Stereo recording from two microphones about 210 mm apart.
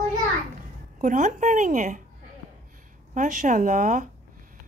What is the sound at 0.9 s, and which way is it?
A woman's voice, 40° right (ahead or behind).